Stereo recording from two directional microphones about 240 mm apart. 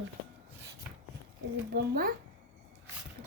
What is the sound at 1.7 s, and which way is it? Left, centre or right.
Speech, right.